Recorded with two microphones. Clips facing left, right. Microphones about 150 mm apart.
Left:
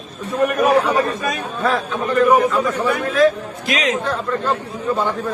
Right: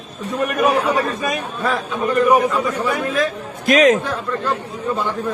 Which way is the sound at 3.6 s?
50° right (ahead or behind).